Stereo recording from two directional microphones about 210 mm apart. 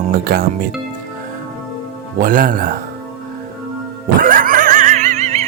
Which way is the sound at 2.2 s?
40° right (ahead or behind).